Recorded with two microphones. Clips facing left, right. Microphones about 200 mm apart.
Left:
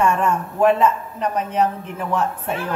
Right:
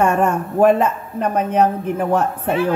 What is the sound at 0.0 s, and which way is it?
A man's voice, 55° right (ahead or behind).